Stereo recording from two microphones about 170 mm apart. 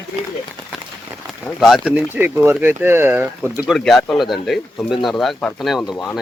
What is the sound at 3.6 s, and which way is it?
Speech, centre (ahead or behind).